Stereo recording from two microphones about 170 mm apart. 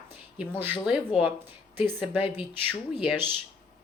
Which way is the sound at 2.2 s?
30° left (ahead or behind).